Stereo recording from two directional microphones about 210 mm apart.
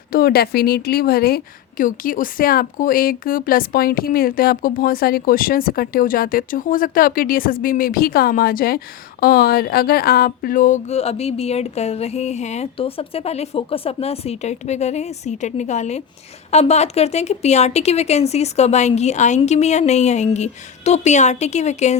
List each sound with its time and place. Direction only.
0.1 s a woman's voice: 45° left (ahead or behind)